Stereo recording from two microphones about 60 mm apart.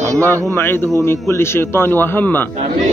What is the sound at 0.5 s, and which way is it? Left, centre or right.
A man's voice, left.